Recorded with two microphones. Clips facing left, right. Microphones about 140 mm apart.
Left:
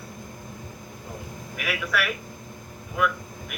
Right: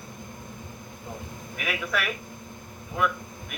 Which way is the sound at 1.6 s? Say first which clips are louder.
Left 2 dB; 25° right (ahead or behind).